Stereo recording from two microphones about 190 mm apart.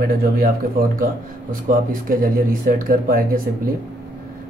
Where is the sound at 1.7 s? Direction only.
45° right (ahead or behind).